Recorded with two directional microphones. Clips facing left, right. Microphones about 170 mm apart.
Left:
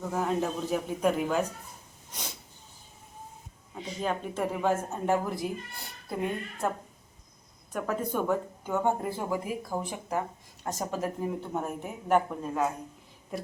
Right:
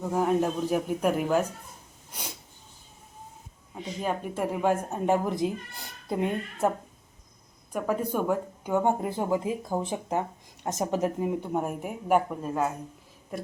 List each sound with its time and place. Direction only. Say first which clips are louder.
0.0 s speech: right 4 dB; 10° right (ahead or behind)
4.0 s speech: right 1 dB; 10° right (ahead or behind)
7.7 s speech: right 3 dB; 10° right (ahead or behind)